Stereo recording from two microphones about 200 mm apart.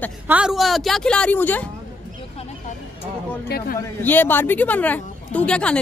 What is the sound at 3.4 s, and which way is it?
Speech, 50° left (ahead or behind).